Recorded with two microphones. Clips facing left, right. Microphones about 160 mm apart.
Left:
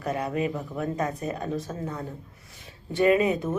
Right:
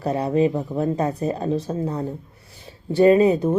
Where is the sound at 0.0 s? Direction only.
30° right (ahead or behind).